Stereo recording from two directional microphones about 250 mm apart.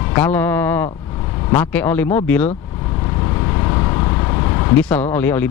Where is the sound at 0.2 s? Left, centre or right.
Centre.